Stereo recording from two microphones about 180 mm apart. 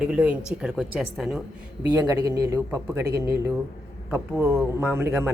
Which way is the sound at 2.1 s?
20° right (ahead or behind).